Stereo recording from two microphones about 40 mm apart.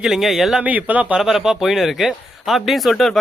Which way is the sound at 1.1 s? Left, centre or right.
Centre.